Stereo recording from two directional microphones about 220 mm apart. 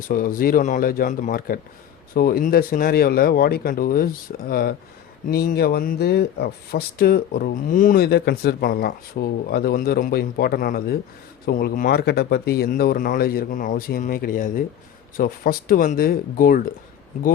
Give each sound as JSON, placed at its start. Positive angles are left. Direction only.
{"t": 0.1, "sound": "speech", "side_deg": 40}